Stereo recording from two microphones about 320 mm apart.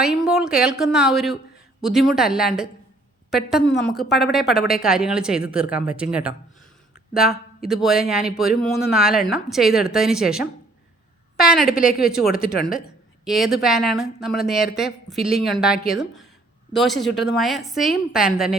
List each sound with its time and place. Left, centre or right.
0.0 s a man's voice: centre